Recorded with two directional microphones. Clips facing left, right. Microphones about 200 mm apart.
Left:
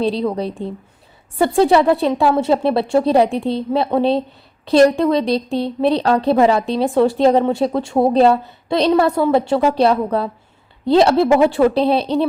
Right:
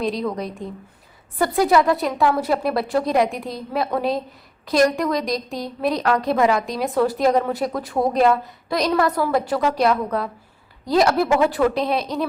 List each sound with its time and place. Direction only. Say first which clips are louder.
0.0 s a woman's voice: left 5 dB; 30° left (ahead or behind)